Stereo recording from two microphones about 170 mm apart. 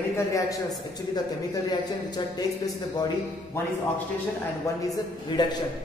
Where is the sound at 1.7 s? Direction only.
25° left (ahead or behind).